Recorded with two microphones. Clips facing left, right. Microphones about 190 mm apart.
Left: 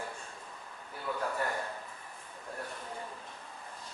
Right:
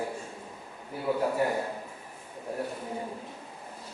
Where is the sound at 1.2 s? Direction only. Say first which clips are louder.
Right 7 dB; 20° right (ahead or behind).